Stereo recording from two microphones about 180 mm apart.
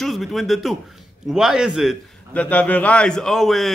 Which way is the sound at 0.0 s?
Centre (ahead or behind).